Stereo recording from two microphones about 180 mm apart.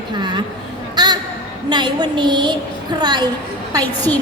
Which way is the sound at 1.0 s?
20° right (ahead or behind).